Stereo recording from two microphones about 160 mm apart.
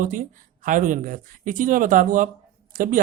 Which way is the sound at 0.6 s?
55° right (ahead or behind).